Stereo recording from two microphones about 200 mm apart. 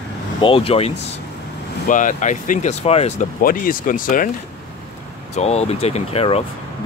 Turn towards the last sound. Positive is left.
turn(degrees=30)  # may be behind; listen again after turning